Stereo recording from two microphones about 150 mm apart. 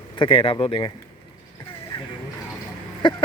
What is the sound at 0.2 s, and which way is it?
Speech, 35° left (ahead or behind).